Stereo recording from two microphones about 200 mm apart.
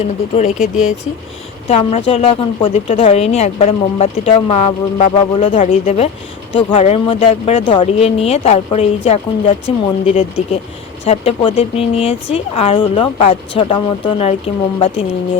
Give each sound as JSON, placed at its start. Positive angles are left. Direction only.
{"t": 1.6, "sound": "speech", "side_deg": 30}